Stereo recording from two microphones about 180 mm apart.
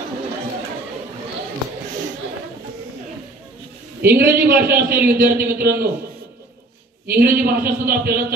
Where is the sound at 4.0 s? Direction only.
55° right (ahead or behind).